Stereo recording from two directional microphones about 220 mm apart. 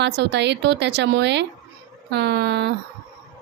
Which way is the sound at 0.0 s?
50° right (ahead or behind).